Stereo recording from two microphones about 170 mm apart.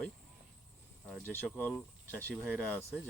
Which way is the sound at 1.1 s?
5° left (ahead or behind).